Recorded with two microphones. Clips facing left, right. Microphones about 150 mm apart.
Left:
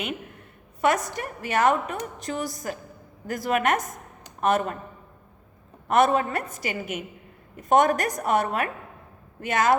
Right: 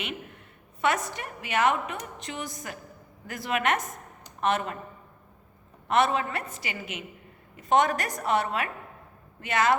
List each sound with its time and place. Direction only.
0.8 s a woman's voice: 40° left (ahead or behind)
5.9 s a woman's voice: 45° left (ahead or behind)